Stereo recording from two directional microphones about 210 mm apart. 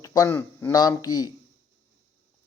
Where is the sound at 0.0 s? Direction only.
15° left (ahead or behind).